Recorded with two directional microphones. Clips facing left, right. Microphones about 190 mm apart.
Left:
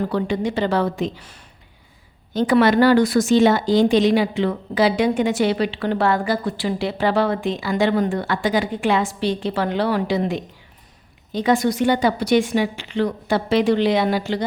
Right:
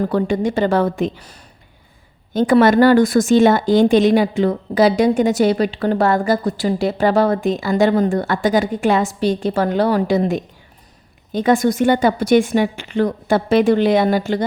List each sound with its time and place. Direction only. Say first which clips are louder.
0.0 s speech: right 4 dB; 45° right (ahead or behind)